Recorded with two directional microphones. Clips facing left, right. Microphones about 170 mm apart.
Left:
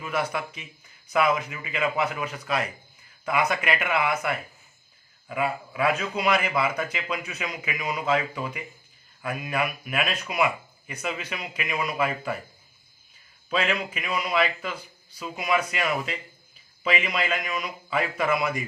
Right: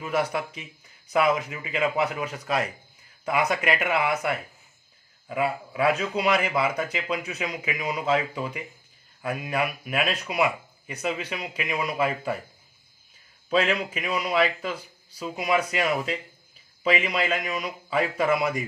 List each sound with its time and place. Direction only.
0.0 s speech: 35° right (ahead or behind)
13.5 s speech: 35° right (ahead or behind)